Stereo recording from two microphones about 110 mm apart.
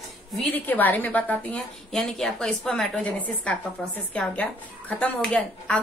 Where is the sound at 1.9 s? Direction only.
5° left (ahead or behind).